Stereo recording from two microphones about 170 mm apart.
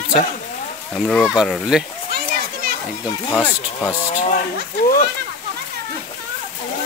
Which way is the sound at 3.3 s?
10° left (ahead or behind).